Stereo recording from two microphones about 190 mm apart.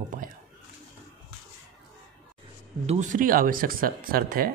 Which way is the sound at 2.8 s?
35° right (ahead or behind).